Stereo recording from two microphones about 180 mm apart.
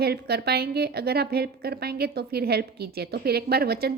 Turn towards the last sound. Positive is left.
turn(degrees=-60)  # may be behind; listen again after turning